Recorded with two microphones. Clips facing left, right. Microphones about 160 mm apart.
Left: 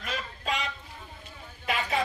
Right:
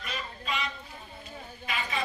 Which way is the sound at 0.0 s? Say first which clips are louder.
Left 3 dB; 90° left.